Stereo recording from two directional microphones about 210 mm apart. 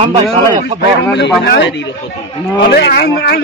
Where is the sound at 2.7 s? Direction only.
50° left (ahead or behind).